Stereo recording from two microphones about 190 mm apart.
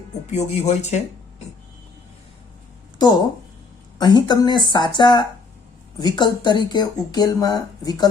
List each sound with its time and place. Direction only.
0.3 s speech: 35° left (ahead or behind)
3.0 s speech: 20° left (ahead or behind)